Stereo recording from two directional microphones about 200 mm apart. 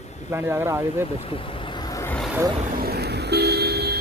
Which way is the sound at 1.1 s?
30° left (ahead or behind).